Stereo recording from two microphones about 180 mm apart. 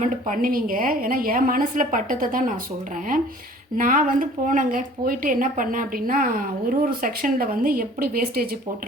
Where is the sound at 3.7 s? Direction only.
50° right (ahead or behind).